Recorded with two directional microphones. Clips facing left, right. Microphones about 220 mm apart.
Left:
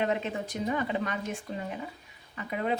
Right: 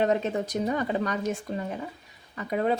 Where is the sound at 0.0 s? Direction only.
40° right (ahead or behind).